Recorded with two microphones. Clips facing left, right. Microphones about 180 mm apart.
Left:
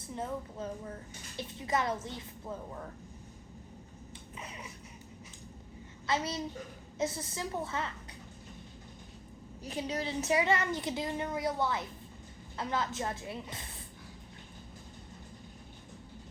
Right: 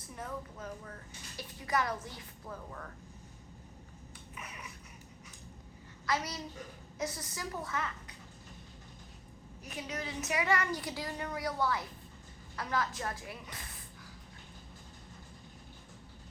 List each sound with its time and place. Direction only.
0.1 s a woman's voice: 25° left (ahead or behind)
4.4 s a sound: 25° left (ahead or behind)
6.1 s a woman's voice: 25° left (ahead or behind)
9.6 s a woman's voice: 30° left (ahead or behind)